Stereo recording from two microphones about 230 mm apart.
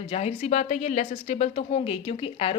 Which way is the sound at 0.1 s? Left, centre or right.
Left.